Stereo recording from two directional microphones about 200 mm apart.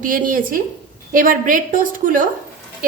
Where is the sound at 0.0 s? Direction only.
45° right (ahead or behind).